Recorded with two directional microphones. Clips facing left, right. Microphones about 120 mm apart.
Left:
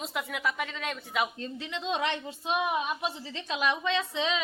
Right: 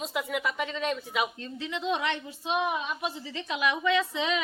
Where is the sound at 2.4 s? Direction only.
20° right (ahead or behind).